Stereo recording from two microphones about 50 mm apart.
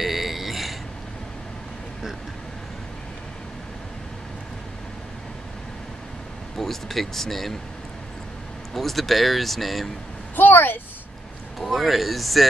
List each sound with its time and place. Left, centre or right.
0.0 s a sound: centre
6.5 s speech: centre
8.7 s speech: centre
10.3 s speech: left
11.6 s speech: centre